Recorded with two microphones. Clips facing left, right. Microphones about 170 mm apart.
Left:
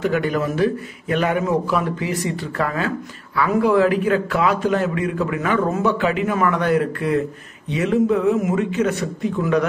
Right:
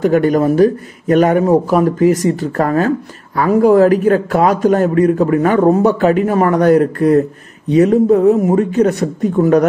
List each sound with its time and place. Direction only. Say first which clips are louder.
0.0 s a man's voice: right 8 dB; 40° right (ahead or behind)